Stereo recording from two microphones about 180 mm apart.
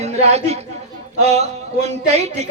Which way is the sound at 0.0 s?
35° right (ahead or behind).